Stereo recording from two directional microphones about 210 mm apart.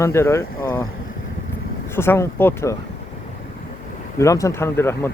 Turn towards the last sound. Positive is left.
turn(degrees=10)  # may be behind; listen again after turning